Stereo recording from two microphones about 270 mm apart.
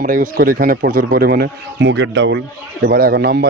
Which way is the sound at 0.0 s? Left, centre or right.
Right.